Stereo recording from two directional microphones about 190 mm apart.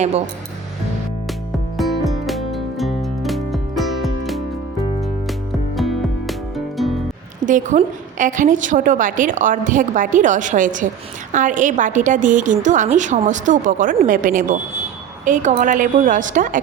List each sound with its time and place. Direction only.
1.7 s music: centre (ahead or behind)
5.7 s music: centre (ahead or behind)
7.4 s a woman's voice: 45° right (ahead or behind)